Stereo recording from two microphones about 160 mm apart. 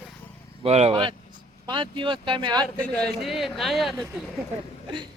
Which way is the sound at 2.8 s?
5° left (ahead or behind).